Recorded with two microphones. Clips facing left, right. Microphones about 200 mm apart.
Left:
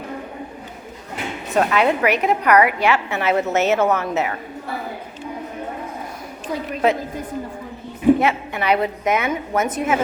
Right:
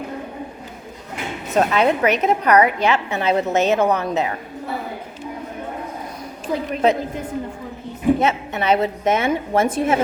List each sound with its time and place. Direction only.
1.5 s a woman's voice: 20° right (ahead or behind)
8.2 s a woman's voice: 20° right (ahead or behind)